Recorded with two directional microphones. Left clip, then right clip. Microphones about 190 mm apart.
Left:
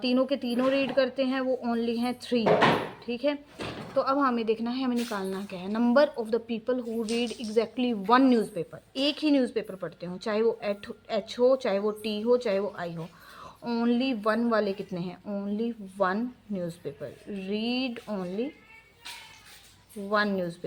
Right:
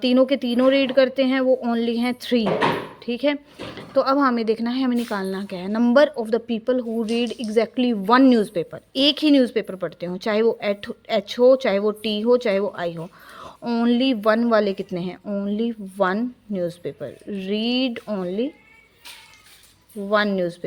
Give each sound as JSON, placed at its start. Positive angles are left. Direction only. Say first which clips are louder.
{"t": 0.0, "sound": "a woman's voice", "louder": "right 8 dB", "side_deg": -45}
{"t": 20.1, "sound": "a woman's voice", "louder": "right 7 dB", "side_deg": -40}